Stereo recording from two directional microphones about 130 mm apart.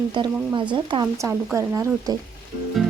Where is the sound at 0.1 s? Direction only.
35° right (ahead or behind).